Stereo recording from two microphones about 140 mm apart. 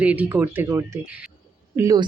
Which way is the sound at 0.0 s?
10° right (ahead or behind).